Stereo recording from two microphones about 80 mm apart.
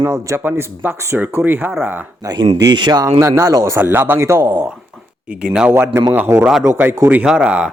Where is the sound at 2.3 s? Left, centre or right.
Right.